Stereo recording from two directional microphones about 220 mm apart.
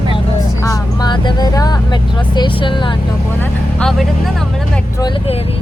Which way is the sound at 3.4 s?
5° left (ahead or behind).